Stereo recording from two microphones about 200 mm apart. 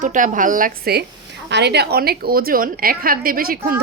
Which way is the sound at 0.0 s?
40° right (ahead or behind).